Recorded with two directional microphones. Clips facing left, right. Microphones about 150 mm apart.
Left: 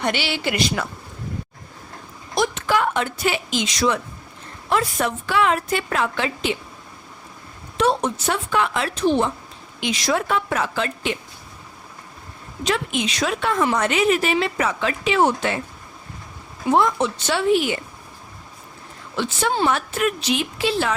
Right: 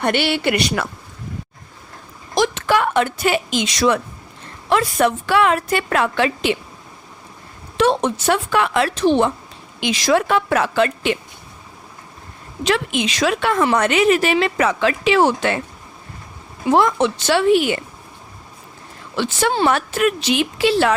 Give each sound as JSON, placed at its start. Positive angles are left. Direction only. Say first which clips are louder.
{"t": 0.0, "sound": "speech", "louder": "right 5 dB", "side_deg": -55}
{"t": 2.3, "sound": "a woman's voice", "louder": "right 3 dB", "side_deg": -90}
{"t": 4.7, "sound": "a woman's voice", "louder": "right 5 dB", "side_deg": -80}
{"t": 7.8, "sound": "a woman's voice", "louder": "right 3 dB", "side_deg": -90}
{"t": 9.8, "sound": "a woman's voice", "louder": "right 5 dB", "side_deg": -90}
{"t": 12.6, "sound": "a woman's voice", "louder": "right 3 dB", "side_deg": -80}
{"t": 16.7, "sound": "a woman's voice", "louder": "right 3 dB", "side_deg": -85}
{"t": 19.1, "sound": "a woman's voice", "louder": "right 3 dB", "side_deg": -80}